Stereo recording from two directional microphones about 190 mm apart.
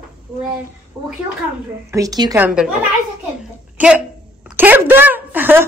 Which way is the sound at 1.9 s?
20° right (ahead or behind).